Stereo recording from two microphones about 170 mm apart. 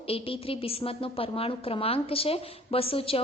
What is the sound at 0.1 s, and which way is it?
A woman's voice, 35° left (ahead or behind).